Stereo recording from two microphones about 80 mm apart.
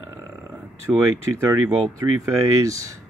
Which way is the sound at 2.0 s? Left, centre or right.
Right.